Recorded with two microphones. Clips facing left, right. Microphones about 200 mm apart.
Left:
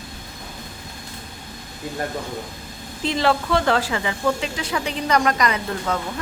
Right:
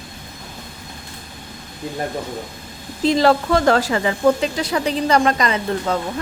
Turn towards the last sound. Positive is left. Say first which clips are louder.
# right 4 dB
turn(degrees=-30)  # may be behind; listen again after turning